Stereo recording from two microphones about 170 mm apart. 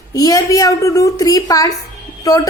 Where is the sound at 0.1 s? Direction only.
20° left (ahead or behind).